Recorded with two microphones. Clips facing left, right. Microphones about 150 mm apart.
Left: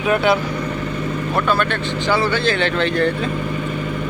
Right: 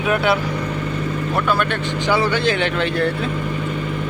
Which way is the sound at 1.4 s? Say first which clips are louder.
Left 1 dB; 10° right (ahead or behind).